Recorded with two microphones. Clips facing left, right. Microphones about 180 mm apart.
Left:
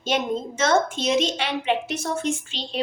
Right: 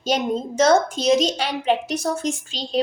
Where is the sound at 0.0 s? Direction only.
40° right (ahead or behind).